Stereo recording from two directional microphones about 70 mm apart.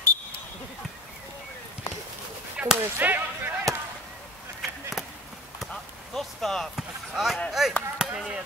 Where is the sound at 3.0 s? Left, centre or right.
Right.